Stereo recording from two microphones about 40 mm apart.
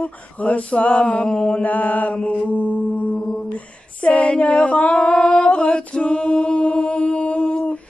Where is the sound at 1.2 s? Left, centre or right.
Centre.